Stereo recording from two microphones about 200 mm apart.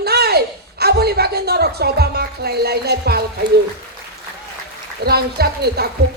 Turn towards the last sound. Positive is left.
turn(degrees=-55)  # may be behind; listen again after turning